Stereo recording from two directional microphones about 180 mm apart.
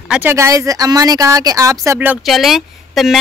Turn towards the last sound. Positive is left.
turn(degrees=0)  # may be behind; listen again after turning